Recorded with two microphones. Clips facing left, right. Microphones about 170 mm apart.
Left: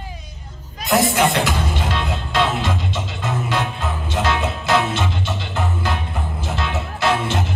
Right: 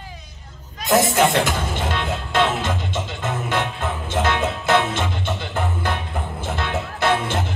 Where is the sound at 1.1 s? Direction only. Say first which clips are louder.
Even; 50° right (ahead or behind).